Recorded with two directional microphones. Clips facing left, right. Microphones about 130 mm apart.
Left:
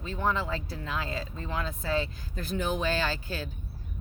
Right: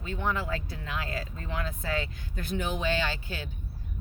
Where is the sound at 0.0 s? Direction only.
30° left (ahead or behind).